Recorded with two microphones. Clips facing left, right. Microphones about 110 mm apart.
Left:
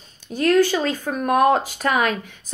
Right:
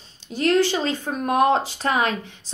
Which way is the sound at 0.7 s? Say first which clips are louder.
Left 2 dB; 25° right (ahead or behind).